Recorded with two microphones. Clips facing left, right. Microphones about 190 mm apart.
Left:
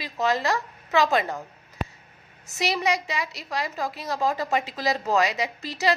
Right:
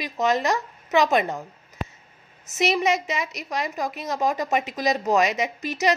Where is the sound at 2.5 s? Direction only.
20° right (ahead or behind).